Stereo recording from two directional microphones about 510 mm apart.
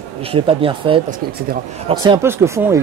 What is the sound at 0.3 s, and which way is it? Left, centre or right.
Speech, centre.